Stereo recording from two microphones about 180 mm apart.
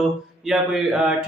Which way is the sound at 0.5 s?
Centre (ahead or behind).